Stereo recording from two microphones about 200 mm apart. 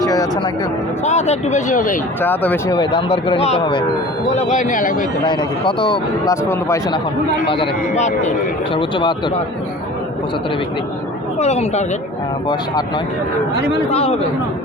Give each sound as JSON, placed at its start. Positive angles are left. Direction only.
{"t": 0.0, "sound": "a sound", "side_deg": 20}
{"t": 1.0, "sound": "speech", "side_deg": 35}
{"t": 2.2, "sound": "speech", "side_deg": 10}
{"t": 2.7, "sound": "speech", "side_deg": 20}
{"t": 4.4, "sound": "speech", "side_deg": 35}
{"t": 5.2, "sound": "speech", "side_deg": 20}
{"t": 7.4, "sound": "speech", "side_deg": 25}
{"t": 8.7, "sound": "speech", "side_deg": 25}
{"t": 11.3, "sound": "speech", "side_deg": 35}
{"t": 13.6, "sound": "a man's voice", "side_deg": -60}
{"t": 13.9, "sound": "speech", "side_deg": 30}